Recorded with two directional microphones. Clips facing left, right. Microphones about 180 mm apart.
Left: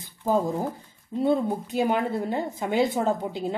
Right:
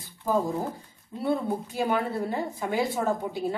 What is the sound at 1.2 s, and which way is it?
A woman's voice, 20° left (ahead or behind).